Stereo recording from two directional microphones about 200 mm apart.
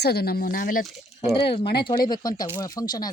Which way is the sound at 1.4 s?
25° left (ahead or behind).